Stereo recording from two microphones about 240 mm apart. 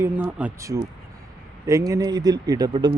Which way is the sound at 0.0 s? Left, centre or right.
Centre.